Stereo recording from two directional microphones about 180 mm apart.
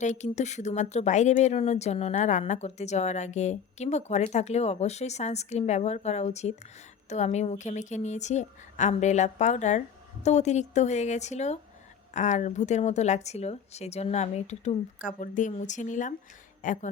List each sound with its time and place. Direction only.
0.0 s speech: 40° left (ahead or behind)